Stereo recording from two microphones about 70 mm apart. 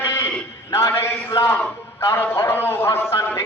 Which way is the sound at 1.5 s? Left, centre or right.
Left.